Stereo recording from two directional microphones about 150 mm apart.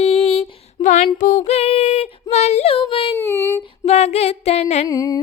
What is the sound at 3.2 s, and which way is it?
Child singing, 15° left (ahead or behind).